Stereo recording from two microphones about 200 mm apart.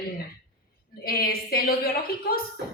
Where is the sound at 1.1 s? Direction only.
50° left (ahead or behind).